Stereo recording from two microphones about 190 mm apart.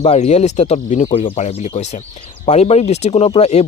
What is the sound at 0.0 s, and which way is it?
Speech, 35° left (ahead or behind).